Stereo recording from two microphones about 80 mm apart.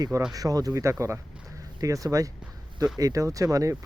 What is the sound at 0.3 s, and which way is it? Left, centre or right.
Speech, right.